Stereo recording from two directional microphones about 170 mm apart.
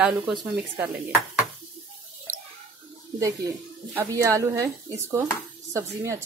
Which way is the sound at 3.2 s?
20° right (ahead or behind).